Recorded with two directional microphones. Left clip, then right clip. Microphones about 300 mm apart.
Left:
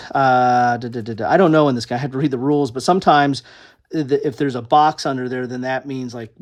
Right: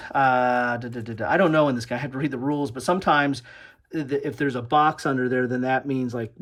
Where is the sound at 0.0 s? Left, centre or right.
Centre.